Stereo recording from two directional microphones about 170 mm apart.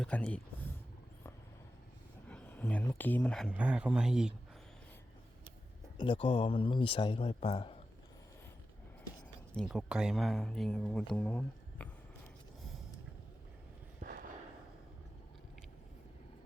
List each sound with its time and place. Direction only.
0.0 s speech: 5° left (ahead or behind)
2.2 s speech: 10° left (ahead or behind)
3.5 s speech: 5° right (ahead or behind)
6.0 s speech: 30° left (ahead or behind)
9.5 s speech: centre (ahead or behind)
14.0 s a sound: 55° right (ahead or behind)